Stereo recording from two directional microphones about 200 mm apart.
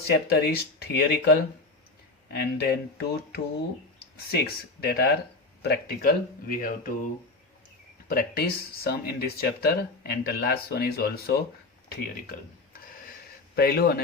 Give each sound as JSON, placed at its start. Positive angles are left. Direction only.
{"t": 0.3, "sound": "speech", "side_deg": 50}